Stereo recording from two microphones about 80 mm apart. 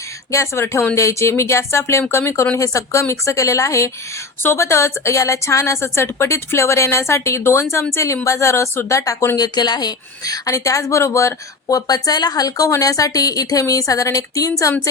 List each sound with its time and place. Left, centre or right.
0.3 s speech: left
11.9 s a woman's voice: left